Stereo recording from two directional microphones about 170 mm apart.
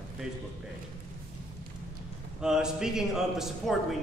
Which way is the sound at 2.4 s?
5° right (ahead or behind).